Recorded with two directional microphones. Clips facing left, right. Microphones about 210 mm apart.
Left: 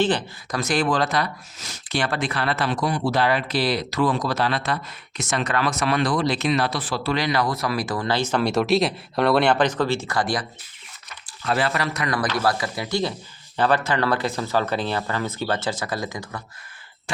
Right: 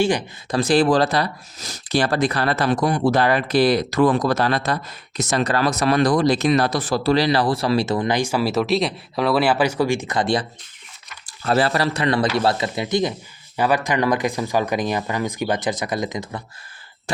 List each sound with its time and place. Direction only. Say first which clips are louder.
0.0 s speech: right 2 dB; 10° right (ahead or behind)
0.5 s speech: right 6 dB; 30° right (ahead or behind)
11.3 s speech: right 4 dB; 40° right (ahead or behind); by 16.4 s 20° right (ahead or behind)